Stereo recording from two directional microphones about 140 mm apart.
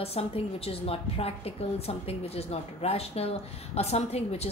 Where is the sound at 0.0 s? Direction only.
45° left (ahead or behind).